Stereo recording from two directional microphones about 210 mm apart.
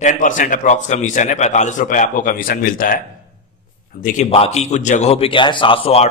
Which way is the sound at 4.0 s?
30° left (ahead or behind).